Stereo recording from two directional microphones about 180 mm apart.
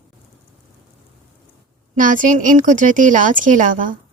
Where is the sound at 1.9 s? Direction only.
45° right (ahead or behind).